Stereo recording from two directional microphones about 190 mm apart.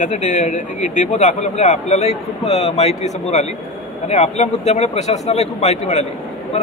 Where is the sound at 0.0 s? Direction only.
40° left (ahead or behind).